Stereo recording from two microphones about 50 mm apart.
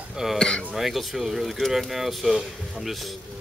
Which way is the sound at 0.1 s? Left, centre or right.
Centre.